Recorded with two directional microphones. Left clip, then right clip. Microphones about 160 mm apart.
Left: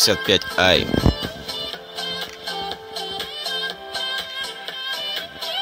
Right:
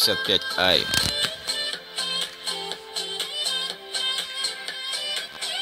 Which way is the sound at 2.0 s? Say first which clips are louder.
Even; 40° left (ahead or behind).